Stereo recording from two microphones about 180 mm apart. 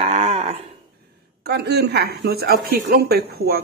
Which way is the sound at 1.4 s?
65° right (ahead or behind).